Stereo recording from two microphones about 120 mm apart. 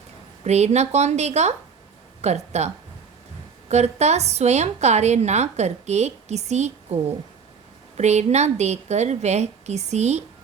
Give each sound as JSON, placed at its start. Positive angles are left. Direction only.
{"t": 0.4, "sound": "a woman's voice", "side_deg": -65}